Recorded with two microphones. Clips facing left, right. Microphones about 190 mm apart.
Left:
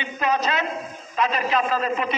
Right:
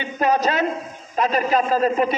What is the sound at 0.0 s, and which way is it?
A man's voice, 45° right (ahead or behind).